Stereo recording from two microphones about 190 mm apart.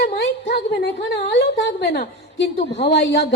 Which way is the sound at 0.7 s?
60° left (ahead or behind).